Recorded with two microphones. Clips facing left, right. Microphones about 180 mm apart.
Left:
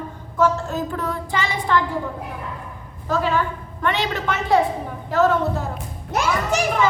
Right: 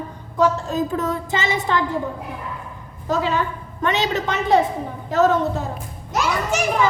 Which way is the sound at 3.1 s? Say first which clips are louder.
Even; 20° right (ahead or behind).